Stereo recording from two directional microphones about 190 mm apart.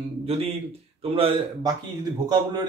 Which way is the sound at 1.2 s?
30° right (ahead or behind).